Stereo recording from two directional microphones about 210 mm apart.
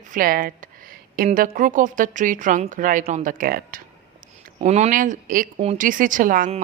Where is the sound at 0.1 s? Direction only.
40° right (ahead or behind).